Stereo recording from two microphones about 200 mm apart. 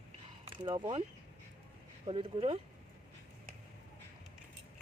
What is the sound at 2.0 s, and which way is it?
Speech, 25° right (ahead or behind).